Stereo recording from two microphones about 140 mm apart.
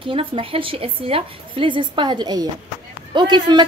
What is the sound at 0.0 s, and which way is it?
A woman's voice, 40° right (ahead or behind).